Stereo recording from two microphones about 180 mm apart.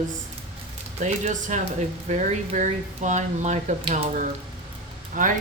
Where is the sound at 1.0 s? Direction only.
45° right (ahead or behind).